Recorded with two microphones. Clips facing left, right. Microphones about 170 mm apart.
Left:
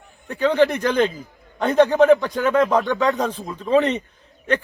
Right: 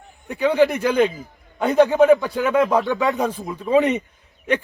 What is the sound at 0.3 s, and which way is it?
A man's voice, 10° right (ahead or behind).